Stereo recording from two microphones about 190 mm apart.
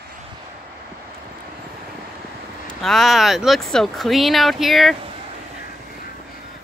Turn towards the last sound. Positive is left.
turn(degrees=0)  # may be behind; listen again after turning